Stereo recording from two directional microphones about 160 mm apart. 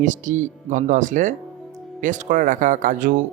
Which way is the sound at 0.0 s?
50° right (ahead or behind).